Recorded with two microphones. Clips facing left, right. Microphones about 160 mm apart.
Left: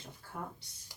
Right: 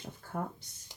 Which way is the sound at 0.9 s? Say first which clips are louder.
Right 2 dB; 20° right (ahead or behind).